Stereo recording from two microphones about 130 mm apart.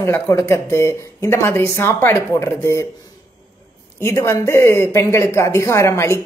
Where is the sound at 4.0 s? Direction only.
20° left (ahead or behind).